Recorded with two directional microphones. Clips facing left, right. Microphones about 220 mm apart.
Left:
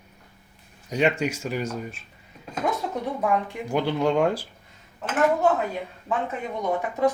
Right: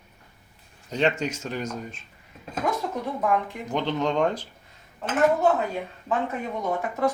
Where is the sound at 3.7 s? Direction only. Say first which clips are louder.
Left 3 dB; 10° left (ahead or behind).